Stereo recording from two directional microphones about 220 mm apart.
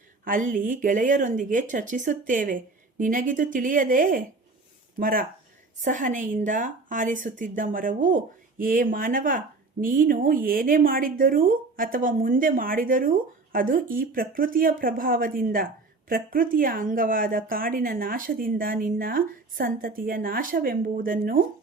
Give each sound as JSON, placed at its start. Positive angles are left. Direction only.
{"t": 0.3, "sound": "speech", "side_deg": -35}